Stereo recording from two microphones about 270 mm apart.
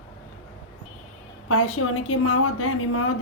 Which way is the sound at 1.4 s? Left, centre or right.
Left.